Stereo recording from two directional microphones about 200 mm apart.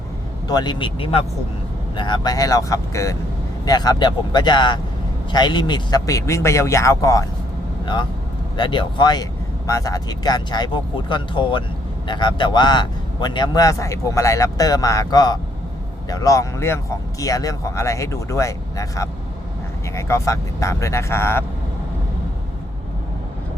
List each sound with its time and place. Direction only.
0.4 s a man's voice: 20° left (ahead or behind)
8.5 s a man's voice: 25° left (ahead or behind)